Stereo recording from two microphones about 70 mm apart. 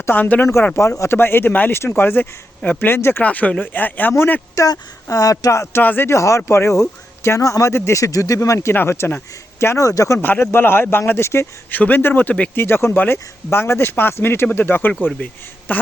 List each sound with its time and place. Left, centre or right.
0.0 s speech: left
0.8 s speech: left
3.2 s a man's voice: left
4.5 s speech: left
5.7 s a man's voice: left
6.1 s speech: left
8.7 s speech: left
9.8 s speech: left
10.2 s speech: left
11.7 s a man's voice: left